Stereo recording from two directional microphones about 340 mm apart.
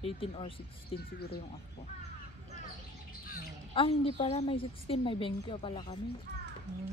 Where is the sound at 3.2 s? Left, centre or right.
Left.